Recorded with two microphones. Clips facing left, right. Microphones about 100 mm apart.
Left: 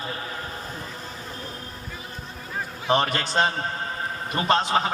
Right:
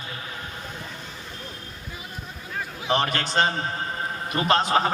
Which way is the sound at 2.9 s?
5° left (ahead or behind).